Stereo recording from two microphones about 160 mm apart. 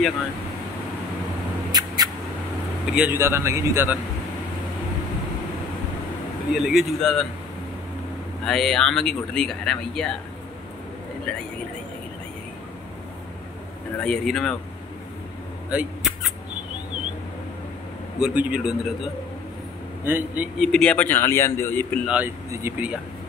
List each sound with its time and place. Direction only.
1.7 s a sound: 25° right (ahead or behind)
2.9 s a man's voice: 10° right (ahead or behind)
6.5 s speech: centre (ahead or behind)
8.5 s speech: 5° left (ahead or behind)
11.3 s speech: 5° left (ahead or behind)
14.0 s speech: 5° left (ahead or behind)
15.7 s a sound: 5° right (ahead or behind)
18.2 s speech: 10° right (ahead or behind)
20.1 s a man's voice: 15° right (ahead or behind)
20.5 s a man's voice: centre (ahead or behind)
22.0 s a man's voice: 10° right (ahead or behind)